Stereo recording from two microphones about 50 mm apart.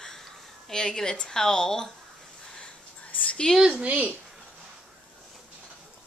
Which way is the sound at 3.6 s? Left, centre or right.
Right.